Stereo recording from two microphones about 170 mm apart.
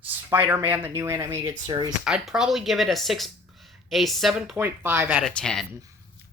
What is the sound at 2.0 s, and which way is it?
Speech, 5° right (ahead or behind).